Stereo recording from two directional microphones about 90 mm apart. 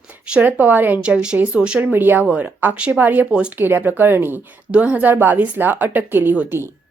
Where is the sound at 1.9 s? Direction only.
20° right (ahead or behind).